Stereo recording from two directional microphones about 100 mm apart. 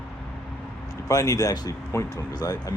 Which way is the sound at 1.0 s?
35° left (ahead or behind).